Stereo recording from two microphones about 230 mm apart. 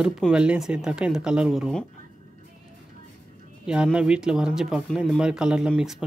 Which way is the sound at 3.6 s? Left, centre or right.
Centre.